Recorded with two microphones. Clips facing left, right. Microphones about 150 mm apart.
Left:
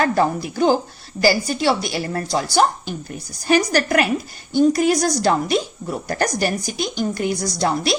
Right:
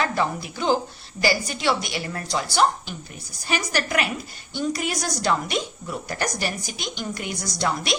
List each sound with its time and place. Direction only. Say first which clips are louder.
0.0 s a woman's voice: left 6 dB; 40° left (ahead or behind)